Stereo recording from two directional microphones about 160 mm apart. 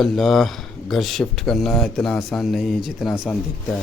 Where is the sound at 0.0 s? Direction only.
Centre (ahead or behind).